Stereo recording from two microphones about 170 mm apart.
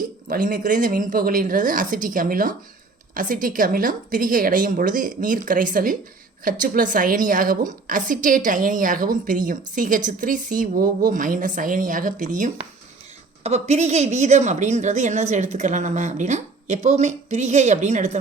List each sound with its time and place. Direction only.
0.3 s a woman's voice: 50° right (ahead or behind)
13.4 s a woman's voice: 40° right (ahead or behind)